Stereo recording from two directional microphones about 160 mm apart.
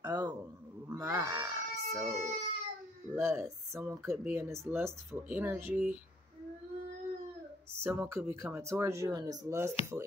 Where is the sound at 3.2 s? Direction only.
15° right (ahead or behind).